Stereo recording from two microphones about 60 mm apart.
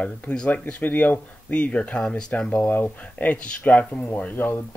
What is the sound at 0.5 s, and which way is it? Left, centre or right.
Speech, left.